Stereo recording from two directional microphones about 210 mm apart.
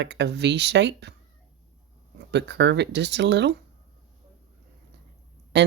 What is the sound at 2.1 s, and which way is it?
Speech, 55° right (ahead or behind).